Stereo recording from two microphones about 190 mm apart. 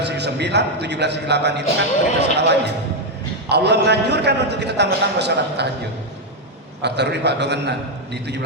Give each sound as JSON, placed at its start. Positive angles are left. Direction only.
{"t": 0.0, "sound": "a man's voice", "side_deg": -65}
{"t": 6.8, "sound": "a man's voice", "side_deg": -65}